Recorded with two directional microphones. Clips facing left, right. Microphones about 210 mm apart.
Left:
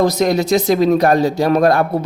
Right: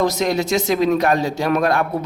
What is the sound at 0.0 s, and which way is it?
A man's voice, 40° left (ahead or behind).